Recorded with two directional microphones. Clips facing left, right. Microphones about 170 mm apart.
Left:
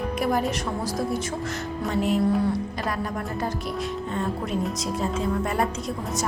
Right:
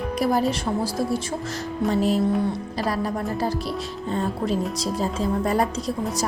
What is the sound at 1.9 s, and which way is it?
A woman's voice, 35° right (ahead or behind).